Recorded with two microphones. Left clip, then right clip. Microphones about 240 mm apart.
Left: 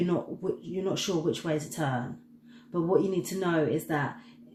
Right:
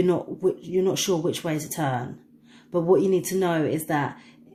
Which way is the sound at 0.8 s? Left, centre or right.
Right.